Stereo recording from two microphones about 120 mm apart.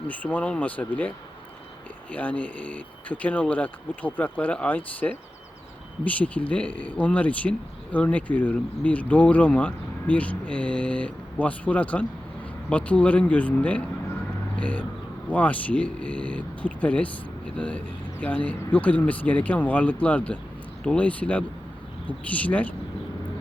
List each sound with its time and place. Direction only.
0.1 s speech: 15° left (ahead or behind)